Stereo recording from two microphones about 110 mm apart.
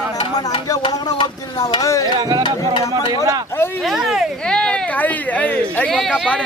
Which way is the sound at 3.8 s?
Centre (ahead or behind).